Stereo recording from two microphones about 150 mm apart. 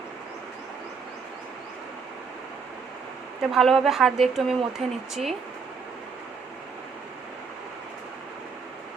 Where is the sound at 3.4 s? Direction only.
Centre (ahead or behind).